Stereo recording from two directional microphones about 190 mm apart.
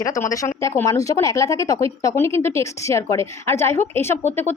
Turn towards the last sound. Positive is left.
turn(degrees=10)  # may be behind; listen again after turning